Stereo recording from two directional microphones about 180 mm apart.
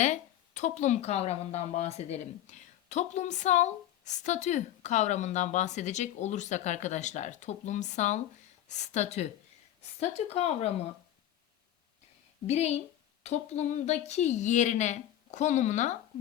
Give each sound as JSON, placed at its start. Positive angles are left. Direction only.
{"t": 0.0, "sound": "speech", "side_deg": 40}
{"t": 12.5, "sound": "speech", "side_deg": 40}